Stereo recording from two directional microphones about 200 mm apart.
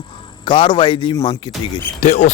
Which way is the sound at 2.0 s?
35° left (ahead or behind).